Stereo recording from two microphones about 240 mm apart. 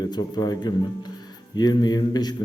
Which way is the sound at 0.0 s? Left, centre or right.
Centre.